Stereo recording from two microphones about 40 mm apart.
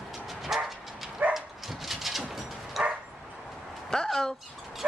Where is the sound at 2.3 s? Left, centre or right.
Centre.